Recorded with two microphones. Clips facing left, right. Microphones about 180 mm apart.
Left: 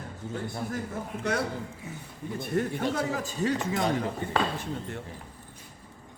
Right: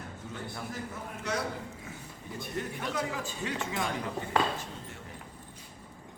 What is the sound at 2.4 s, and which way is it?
Speech, 50° left (ahead or behind).